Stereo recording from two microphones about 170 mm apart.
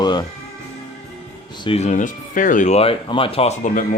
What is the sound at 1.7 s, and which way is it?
Speech, 40° left (ahead or behind).